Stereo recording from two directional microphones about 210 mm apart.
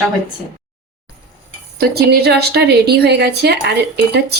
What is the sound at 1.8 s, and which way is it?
A woman's voice, 50° right (ahead or behind).